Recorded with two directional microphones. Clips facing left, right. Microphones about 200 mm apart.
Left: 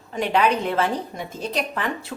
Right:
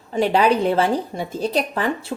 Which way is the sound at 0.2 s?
35° right (ahead or behind).